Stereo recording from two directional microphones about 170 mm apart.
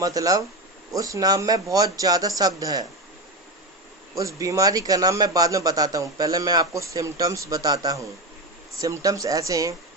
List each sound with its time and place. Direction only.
0.0 s a man's voice: 20° right (ahead or behind)
4.2 s a man's voice: 20° right (ahead or behind)